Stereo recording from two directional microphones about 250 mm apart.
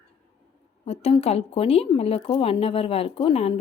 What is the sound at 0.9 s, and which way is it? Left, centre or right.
A woman's voice, left.